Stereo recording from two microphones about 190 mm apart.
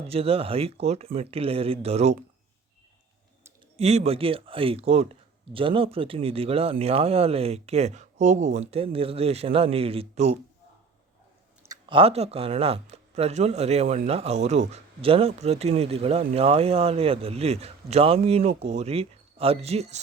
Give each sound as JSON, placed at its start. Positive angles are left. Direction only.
{"t": 0.1, "sound": "speech", "side_deg": -30}
{"t": 3.8, "sound": "speech", "side_deg": -35}
{"t": 11.6, "sound": "speech", "side_deg": -25}